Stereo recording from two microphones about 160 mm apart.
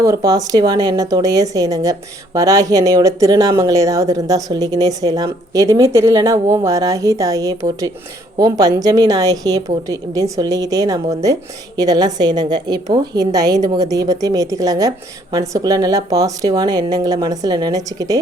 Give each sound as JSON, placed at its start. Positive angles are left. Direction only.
{"t": 0.0, "sound": "speech", "side_deg": -20}